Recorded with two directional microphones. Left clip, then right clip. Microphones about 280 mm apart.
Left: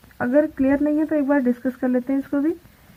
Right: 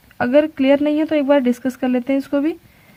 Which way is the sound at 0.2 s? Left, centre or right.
Right.